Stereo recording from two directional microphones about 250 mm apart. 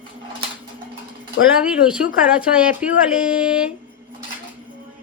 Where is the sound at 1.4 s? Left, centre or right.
Left.